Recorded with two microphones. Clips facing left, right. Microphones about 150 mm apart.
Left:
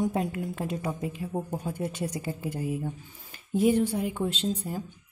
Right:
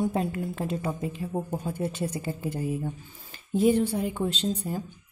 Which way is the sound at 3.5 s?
10° left (ahead or behind).